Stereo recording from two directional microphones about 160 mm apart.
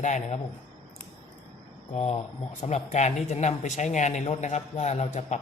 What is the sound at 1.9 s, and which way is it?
Speech, 40° left (ahead or behind).